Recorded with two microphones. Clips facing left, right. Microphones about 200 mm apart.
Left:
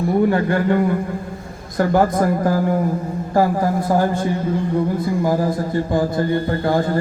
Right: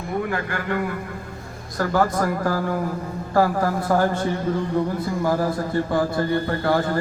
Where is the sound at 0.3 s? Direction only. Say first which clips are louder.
Left 9 dB; 30° left (ahead or behind).